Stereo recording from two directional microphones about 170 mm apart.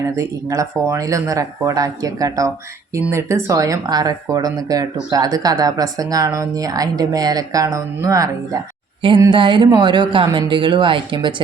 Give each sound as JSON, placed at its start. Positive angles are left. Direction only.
{"t": 0.0, "sound": "speech", "side_deg": -20}
{"t": 9.0, "sound": "speech", "side_deg": -30}